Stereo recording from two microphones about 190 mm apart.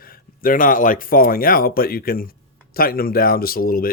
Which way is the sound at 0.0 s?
45° left (ahead or behind).